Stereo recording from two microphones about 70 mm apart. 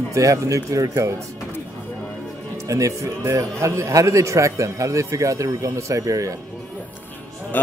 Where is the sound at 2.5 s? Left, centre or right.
Right.